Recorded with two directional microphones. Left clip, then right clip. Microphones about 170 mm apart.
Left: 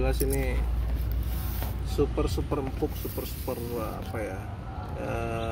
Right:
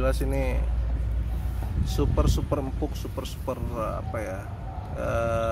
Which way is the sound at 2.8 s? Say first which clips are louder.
Left 2 dB; 40° right (ahead or behind).